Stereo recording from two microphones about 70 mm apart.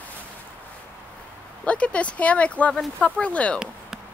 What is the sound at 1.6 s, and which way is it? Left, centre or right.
Speech, centre.